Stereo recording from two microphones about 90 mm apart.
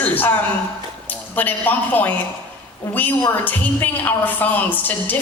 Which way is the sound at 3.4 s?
20° left (ahead or behind).